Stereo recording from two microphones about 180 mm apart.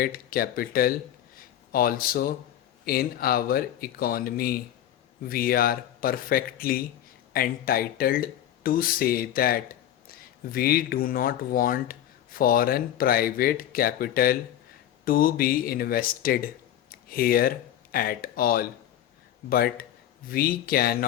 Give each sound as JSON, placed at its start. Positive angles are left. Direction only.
{"t": 0.0, "sound": "speech", "side_deg": 55}